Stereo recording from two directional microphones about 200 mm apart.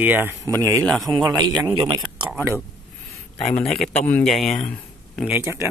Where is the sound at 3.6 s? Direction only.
5° left (ahead or behind).